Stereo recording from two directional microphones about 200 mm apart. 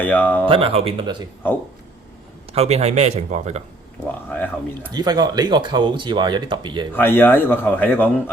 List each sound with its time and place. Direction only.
0.0 s speech: 10° left (ahead or behind)
0.4 s speech: 25° right (ahead or behind)
2.5 s a man's voice: 30° right (ahead or behind)
4.3 s speech: 10° left (ahead or behind)
4.9 s speech: 20° right (ahead or behind)
6.9 s speech: 10° left (ahead or behind)